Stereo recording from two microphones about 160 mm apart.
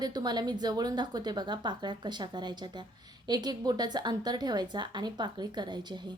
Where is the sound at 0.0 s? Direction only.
25° right (ahead or behind).